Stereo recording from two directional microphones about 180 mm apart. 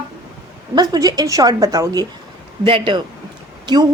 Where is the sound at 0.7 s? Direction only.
20° right (ahead or behind).